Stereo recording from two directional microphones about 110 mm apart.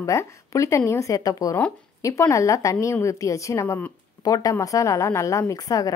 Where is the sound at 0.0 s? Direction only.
25° left (ahead or behind).